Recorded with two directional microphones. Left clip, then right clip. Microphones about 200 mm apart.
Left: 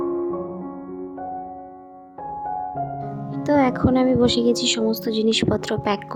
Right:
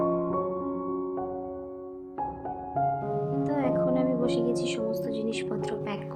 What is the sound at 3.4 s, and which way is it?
Speech, 45° left (ahead or behind).